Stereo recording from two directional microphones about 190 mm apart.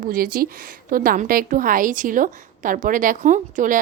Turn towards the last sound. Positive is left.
turn(degrees=-45)  # may be behind; listen again after turning